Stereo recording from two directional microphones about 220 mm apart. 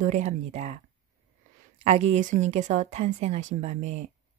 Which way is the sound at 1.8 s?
30° right (ahead or behind).